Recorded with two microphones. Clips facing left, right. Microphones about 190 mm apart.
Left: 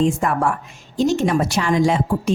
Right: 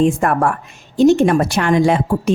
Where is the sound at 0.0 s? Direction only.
60° right (ahead or behind).